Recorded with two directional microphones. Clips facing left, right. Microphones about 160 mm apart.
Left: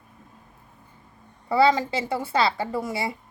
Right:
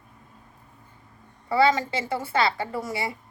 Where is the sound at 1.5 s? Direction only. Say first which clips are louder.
Left 1 dB; 25° left (ahead or behind).